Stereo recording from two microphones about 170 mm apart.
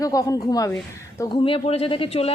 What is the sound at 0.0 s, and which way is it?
A woman's voice, 20° left (ahead or behind).